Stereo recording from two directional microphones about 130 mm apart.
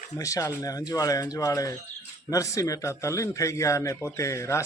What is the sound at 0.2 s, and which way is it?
A man's voice, 25° left (ahead or behind).